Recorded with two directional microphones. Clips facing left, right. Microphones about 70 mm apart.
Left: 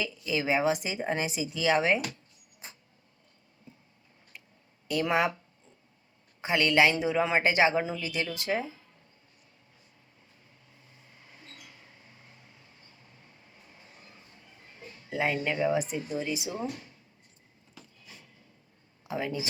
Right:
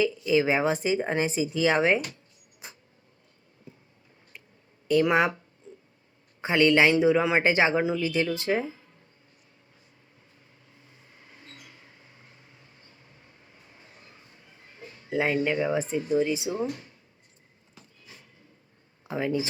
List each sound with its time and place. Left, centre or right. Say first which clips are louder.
0.0 s speech: right 8 dB; right
5.0 s speech: right 4 dB; right
6.4 s speech: right 3 dB; right
7.5 s speech: right 2 dB; right
10.8 s a sound: right 2 dB; right
11.7 s vehicle: right 1 dB; right
15.1 s speech: right 3 dB; centre
15.4 s speech: right 2 dB; centre
15.7 s speech: right 5 dB; right
19.1 s speech: right 5 dB; centre